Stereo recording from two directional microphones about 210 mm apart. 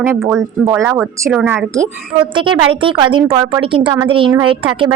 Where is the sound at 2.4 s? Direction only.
25° right (ahead or behind).